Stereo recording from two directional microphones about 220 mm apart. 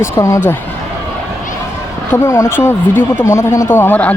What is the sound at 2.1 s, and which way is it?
Speech, 10° left (ahead or behind).